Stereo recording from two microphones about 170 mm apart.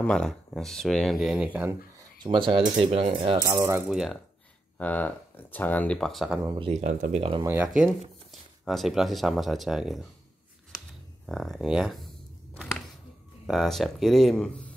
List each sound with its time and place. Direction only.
0.0 s speech: 5° left (ahead or behind)
2.0 s a sound: 30° right (ahead or behind)
2.8 s speech: 35° right (ahead or behind)
3.4 s speech: 15° right (ahead or behind)
3.9 s speech: centre (ahead or behind)
6.6 s speech: 40° right (ahead or behind)
7.4 s speech: 10° right (ahead or behind)
11.2 s speech: centre (ahead or behind)
13.5 s speech: centre (ahead or behind)